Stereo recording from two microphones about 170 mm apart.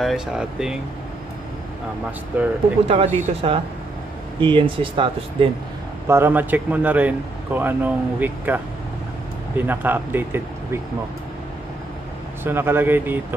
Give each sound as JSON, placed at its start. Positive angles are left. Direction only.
{"t": 0.0, "sound": "speech", "side_deg": -5}
{"t": 2.3, "sound": "speech", "side_deg": -10}
{"t": 2.9, "sound": "speech", "side_deg": -35}
{"t": 6.0, "sound": "speech", "side_deg": -15}
{"t": 9.6, "sound": "speech", "side_deg": -10}
{"t": 12.4, "sound": "speech", "side_deg": -10}